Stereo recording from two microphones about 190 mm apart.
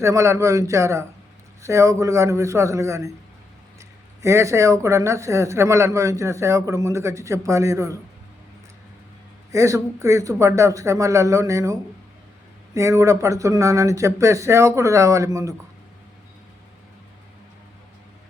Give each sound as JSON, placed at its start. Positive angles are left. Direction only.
{"t": 0.0, "sound": "speech", "side_deg": -15}
{"t": 9.5, "sound": "speech", "side_deg": -15}